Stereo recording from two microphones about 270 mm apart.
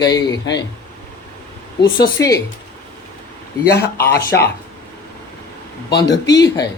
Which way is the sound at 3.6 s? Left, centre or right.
Left.